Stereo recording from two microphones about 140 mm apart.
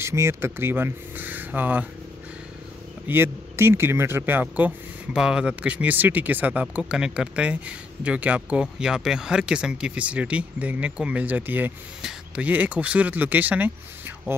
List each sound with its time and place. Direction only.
0.0 s speech: 20° right (ahead or behind)
3.1 s speech: 15° right (ahead or behind)